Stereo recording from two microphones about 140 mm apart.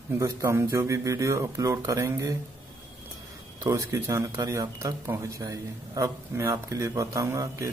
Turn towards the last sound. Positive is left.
turn(degrees=-25)  # may be behind; listen again after turning